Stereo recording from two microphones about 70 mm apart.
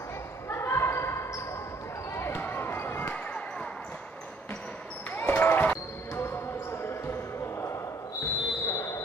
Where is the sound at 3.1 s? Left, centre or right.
Centre.